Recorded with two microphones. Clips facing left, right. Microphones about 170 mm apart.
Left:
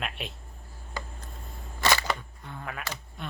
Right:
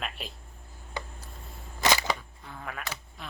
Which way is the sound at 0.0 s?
Centre (ahead or behind).